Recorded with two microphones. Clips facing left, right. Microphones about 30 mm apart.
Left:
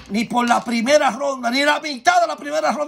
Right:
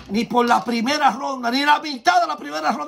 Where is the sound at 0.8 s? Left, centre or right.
Right.